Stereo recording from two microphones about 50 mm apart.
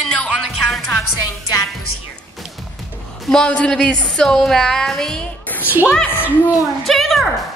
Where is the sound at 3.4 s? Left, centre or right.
Centre.